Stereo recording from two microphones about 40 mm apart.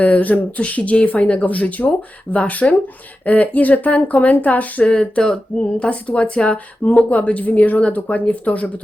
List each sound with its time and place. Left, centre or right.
0.0 s speech: left
4.9 s speech: left